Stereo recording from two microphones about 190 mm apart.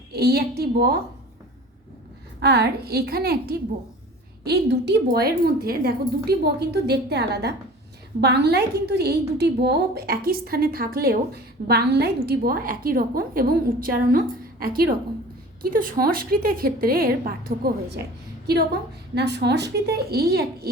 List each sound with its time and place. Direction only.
0.1 s a woman's voice: 55° right (ahead or behind)
2.4 s a woman's voice: 60° right (ahead or behind)
19.1 s a woman's voice: 60° right (ahead or behind)